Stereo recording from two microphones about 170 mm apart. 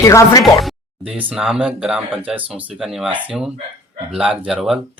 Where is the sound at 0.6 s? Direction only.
Centre (ahead or behind).